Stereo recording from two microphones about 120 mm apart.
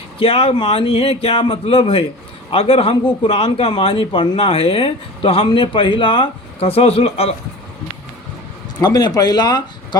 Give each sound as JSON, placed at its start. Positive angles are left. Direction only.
{"t": 0.2, "sound": "a man's voice", "side_deg": 50}
{"t": 8.8, "sound": "speech", "side_deg": 35}